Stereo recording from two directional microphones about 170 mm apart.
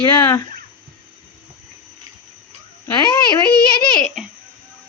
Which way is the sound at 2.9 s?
25° left (ahead or behind).